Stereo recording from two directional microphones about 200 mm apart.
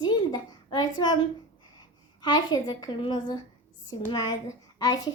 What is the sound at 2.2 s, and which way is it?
A woman's voice, 20° left (ahead or behind).